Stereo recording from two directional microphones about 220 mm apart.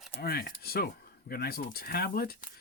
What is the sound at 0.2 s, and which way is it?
Speech, 45° left (ahead or behind).